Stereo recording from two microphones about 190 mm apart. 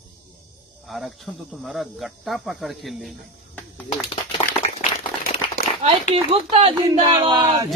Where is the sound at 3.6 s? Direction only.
5° left (ahead or behind).